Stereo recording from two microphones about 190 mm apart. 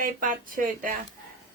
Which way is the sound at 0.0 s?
45° right (ahead or behind).